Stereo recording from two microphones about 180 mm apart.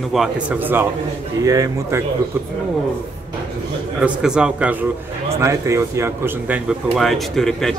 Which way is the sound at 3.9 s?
5° right (ahead or behind).